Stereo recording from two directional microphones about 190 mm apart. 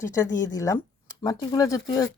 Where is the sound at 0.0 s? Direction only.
15° left (ahead or behind).